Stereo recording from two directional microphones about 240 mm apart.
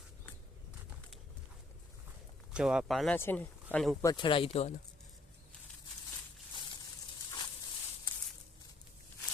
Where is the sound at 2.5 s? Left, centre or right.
Centre.